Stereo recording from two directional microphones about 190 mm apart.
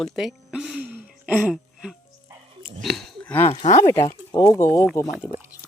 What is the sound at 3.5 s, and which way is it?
Speech, 35° left (ahead or behind).